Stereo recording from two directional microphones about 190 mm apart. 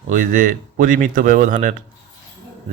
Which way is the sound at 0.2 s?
45° right (ahead or behind).